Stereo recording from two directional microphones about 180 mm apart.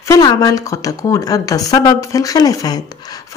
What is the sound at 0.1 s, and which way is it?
Speech, 20° left (ahead or behind).